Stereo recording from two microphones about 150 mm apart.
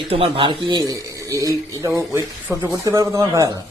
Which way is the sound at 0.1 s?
40° right (ahead or behind).